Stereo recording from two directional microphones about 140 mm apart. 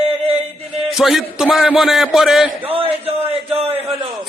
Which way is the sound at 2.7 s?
40° right (ahead or behind).